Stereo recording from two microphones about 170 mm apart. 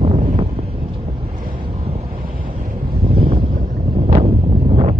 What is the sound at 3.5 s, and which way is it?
Wind noise, 60° right (ahead or behind).